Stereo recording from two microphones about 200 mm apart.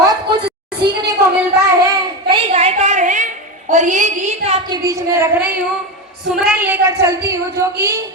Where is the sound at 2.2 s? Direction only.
30° right (ahead or behind).